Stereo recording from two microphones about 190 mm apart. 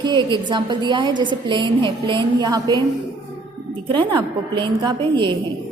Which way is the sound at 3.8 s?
25° right (ahead or behind).